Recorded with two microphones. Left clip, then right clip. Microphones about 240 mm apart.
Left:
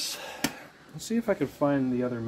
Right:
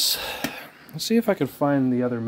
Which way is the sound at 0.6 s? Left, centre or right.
Right.